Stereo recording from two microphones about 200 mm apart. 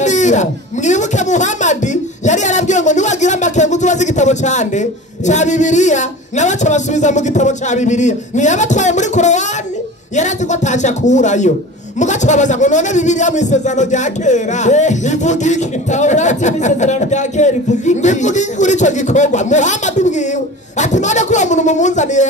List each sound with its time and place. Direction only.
0.0 s speech: 35° left (ahead or behind)